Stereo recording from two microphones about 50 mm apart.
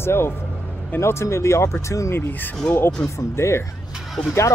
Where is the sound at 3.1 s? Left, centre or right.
Left.